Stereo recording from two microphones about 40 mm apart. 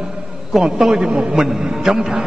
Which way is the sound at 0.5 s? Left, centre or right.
Centre.